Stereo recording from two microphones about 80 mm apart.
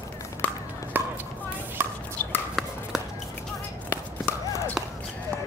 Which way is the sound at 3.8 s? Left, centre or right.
Left.